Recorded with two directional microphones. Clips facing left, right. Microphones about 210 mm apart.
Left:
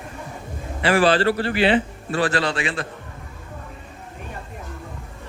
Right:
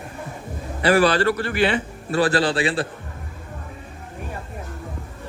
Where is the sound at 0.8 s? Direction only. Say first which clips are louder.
Even; 40° right (ahead or behind).